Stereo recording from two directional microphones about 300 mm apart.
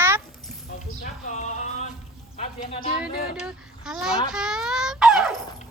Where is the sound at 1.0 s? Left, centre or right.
Left.